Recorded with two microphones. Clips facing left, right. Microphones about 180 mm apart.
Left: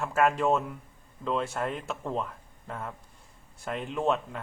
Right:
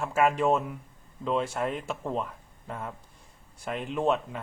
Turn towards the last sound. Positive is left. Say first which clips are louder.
# right 1 dB
turn(degrees=-5)  # may be behind; listen again after turning